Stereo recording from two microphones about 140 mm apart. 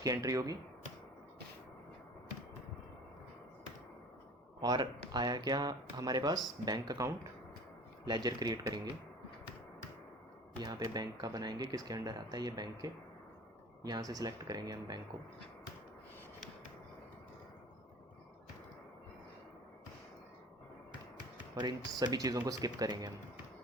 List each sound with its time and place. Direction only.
0.0 s speech: 25° right (ahead or behind)
4.6 s speech: 30° right (ahead or behind)
10.6 s speech: 30° right (ahead or behind)
21.5 s speech: 30° right (ahead or behind)